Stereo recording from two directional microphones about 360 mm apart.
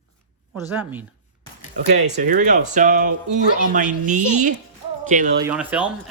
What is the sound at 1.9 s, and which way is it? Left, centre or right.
Speech, right.